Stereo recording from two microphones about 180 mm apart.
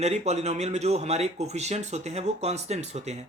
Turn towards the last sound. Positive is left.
turn(degrees=-40)  # may be behind; listen again after turning